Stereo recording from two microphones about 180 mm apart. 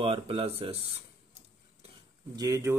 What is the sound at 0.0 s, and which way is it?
Speech, 30° right (ahead or behind).